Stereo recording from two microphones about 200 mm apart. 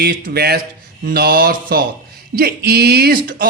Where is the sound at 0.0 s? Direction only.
50° right (ahead or behind).